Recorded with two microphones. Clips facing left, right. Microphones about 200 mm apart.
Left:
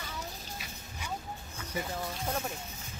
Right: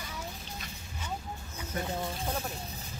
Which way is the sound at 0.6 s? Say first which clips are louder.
Right 1 dB; 10° left (ahead or behind).